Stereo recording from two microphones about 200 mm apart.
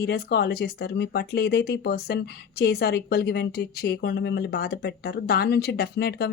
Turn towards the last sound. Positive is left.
turn(degrees=55)  # may be behind; listen again after turning